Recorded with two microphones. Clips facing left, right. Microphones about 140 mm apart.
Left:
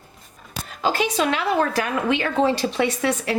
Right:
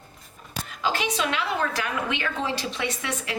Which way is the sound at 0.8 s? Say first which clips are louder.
Left 5 dB; 40° left (ahead or behind).